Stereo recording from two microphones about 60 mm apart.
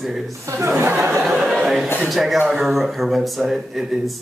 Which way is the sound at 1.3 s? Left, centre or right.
Centre.